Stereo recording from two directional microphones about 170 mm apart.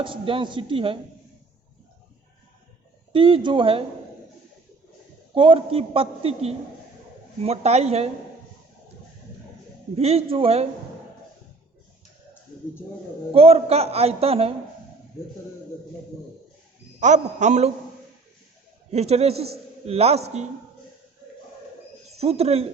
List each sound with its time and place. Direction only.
0.0 s a man's voice: 30° right (ahead or behind)
3.1 s a man's voice: 30° right (ahead or behind)
5.3 s a man's voice: 30° right (ahead or behind)
9.9 s a man's voice: 35° right (ahead or behind)
13.3 s a man's voice: 35° right (ahead or behind)
17.0 s a man's voice: 45° right (ahead or behind)
18.9 s a man's voice: 40° right (ahead or behind)
22.1 s speech: 35° right (ahead or behind)